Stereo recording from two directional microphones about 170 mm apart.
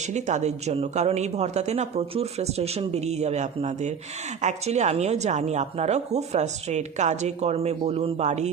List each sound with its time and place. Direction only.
0.1 s a woman's voice: 45° right (ahead or behind)